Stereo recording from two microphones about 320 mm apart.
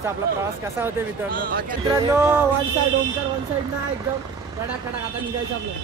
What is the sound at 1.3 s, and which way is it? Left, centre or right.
Speech, right.